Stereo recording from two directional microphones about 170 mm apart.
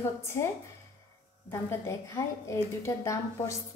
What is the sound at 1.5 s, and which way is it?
A woman's voice, 15° left (ahead or behind).